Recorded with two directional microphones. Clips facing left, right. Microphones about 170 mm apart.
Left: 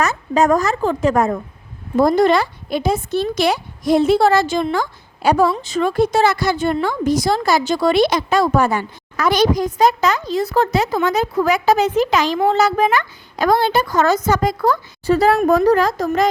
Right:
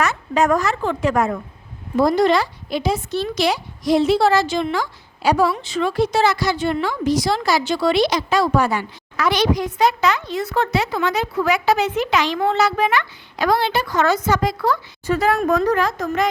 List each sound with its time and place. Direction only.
0.0 s a woman's voice: 40° left (ahead or behind)